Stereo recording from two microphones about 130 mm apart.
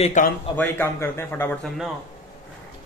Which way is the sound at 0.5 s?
15° left (ahead or behind).